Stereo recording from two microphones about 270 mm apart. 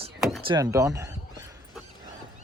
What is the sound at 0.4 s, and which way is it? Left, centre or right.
Speech, centre.